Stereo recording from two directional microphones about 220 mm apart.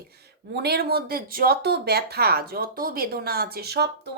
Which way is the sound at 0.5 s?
50° right (ahead or behind).